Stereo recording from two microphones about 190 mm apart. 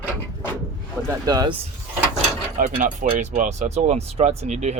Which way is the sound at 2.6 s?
45° right (ahead or behind).